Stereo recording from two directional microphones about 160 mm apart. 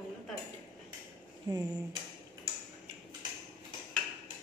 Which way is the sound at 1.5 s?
25° right (ahead or behind).